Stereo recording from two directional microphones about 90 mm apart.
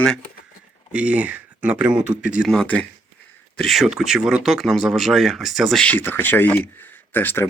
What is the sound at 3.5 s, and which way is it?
Speech, centre (ahead or behind).